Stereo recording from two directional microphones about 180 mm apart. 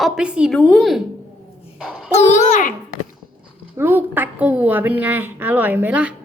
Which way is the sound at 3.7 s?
10° right (ahead or behind).